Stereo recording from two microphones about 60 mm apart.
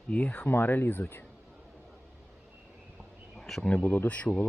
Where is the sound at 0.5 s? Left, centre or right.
Left.